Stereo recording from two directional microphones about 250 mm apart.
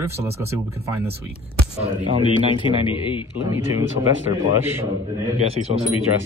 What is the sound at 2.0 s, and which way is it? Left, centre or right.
Speech, right.